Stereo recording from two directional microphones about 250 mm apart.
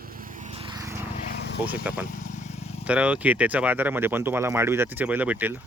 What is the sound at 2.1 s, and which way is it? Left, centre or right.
Vehicle, left.